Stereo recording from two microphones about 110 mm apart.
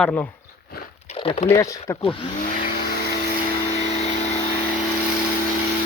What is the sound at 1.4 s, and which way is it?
Speech, 30° left (ahead or behind).